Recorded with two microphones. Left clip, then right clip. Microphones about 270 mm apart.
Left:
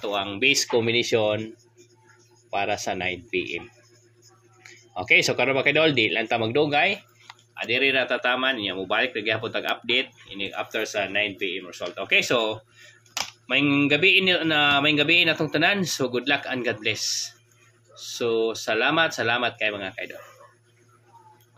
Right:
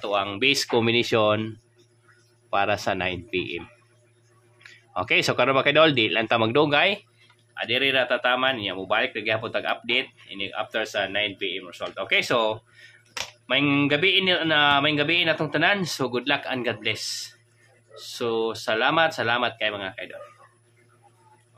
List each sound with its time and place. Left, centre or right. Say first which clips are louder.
0.0 s speech: even; centre
2.5 s speech: right 3 dB; centre
4.6 s speech: left 3 dB; centre